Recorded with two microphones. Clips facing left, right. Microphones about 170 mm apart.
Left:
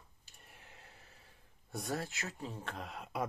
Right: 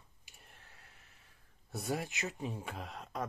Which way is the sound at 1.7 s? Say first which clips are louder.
Right 1 dB; 10° right (ahead or behind).